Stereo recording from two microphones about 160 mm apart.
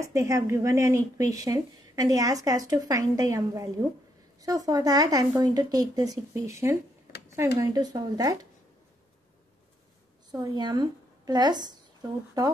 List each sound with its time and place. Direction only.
0.0 s a woman's voice: 20° right (ahead or behind)
10.3 s a woman's voice: 25° right (ahead or behind)